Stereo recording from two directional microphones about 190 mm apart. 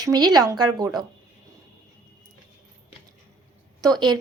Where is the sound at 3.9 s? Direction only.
20° right (ahead or behind).